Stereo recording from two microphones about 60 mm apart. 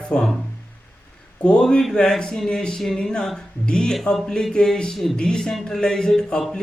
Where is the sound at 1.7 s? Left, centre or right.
Centre.